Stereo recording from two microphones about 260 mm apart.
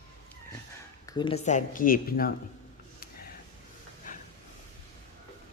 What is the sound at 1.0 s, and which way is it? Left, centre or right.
Speech, centre.